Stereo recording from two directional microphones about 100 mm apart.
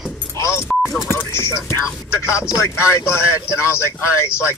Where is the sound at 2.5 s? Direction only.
30° left (ahead or behind).